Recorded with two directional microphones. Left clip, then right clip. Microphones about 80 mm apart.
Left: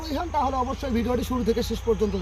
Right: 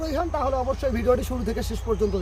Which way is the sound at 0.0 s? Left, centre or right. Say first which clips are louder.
Even; right.